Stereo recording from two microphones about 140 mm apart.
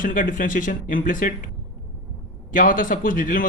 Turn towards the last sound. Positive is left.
turn(degrees=75)  # may be behind; listen again after turning